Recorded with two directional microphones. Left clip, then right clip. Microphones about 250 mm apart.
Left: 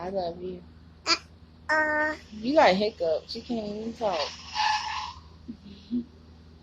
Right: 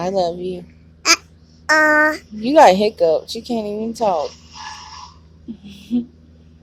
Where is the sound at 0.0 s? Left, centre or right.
Right.